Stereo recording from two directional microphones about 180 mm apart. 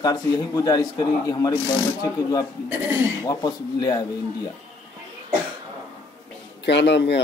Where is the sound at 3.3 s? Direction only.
25° left (ahead or behind).